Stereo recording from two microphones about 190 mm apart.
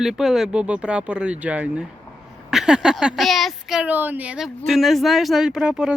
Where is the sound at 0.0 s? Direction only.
Centre (ahead or behind).